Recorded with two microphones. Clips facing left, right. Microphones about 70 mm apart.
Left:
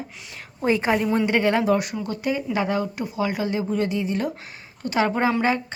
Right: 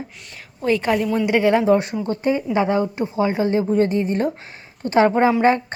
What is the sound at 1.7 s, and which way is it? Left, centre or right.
A woman's voice, right.